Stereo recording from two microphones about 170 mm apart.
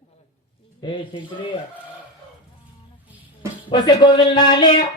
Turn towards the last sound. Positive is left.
turn(degrees=25)  # may be behind; listen again after turning